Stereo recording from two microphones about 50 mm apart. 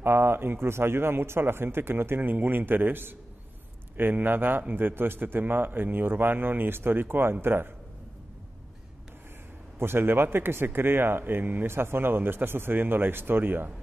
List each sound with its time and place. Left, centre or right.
0.0 s speech: right
9.8 s speech: right